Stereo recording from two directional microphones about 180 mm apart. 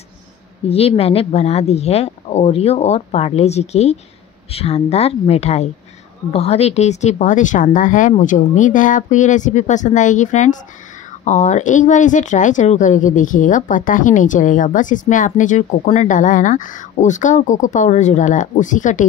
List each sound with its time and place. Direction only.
0.7 s speech: 35° left (ahead or behind)